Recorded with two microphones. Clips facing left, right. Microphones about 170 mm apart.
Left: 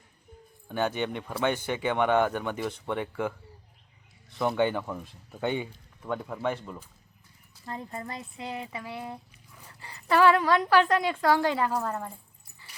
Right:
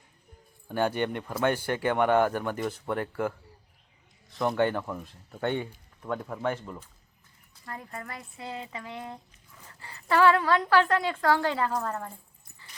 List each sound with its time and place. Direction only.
0.7 s speech: 10° right (ahead or behind)
7.6 s speech: 25° left (ahead or behind)